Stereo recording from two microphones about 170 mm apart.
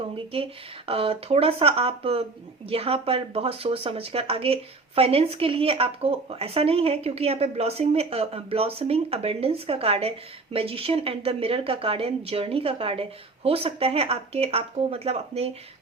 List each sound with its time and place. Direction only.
0.9 s speech: 35° right (ahead or behind)